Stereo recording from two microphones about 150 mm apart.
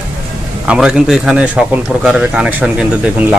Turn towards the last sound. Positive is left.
turn(degrees=-10)  # may be behind; listen again after turning